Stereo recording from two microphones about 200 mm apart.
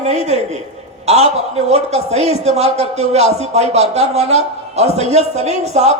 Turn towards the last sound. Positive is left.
turn(degrees=-35)  # may be behind; listen again after turning